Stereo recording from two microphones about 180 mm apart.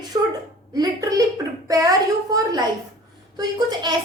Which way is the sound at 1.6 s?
20° right (ahead or behind).